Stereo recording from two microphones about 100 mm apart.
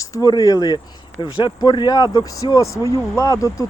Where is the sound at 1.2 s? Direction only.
50° left (ahead or behind); by 3.7 s 35° left (ahead or behind).